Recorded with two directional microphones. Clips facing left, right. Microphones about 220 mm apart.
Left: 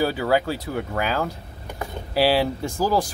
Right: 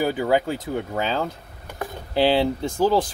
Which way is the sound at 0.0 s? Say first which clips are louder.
Even; 20° right (ahead or behind).